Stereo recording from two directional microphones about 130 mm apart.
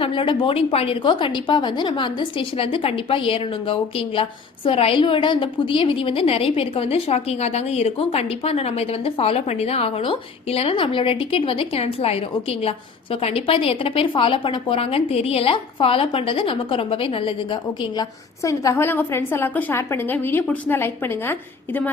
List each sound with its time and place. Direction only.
0.0 s a woman's voice: 40° left (ahead or behind)
18.4 s a woman's voice: 25° left (ahead or behind)